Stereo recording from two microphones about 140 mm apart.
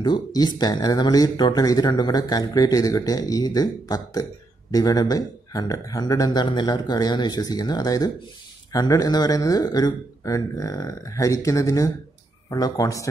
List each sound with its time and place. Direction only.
0.0 s speech: 30° left (ahead or behind)